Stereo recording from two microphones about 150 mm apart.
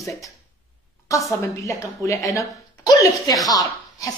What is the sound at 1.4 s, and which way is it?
Speech, 20° left (ahead or behind).